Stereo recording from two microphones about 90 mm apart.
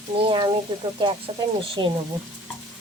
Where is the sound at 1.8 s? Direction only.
50° right (ahead or behind).